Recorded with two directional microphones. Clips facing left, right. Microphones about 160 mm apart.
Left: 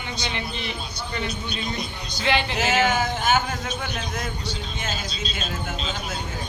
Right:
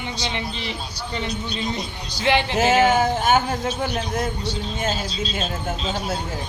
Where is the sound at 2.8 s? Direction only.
35° right (ahead or behind).